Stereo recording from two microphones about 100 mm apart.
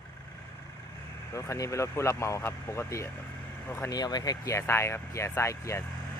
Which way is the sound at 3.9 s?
40° left (ahead or behind).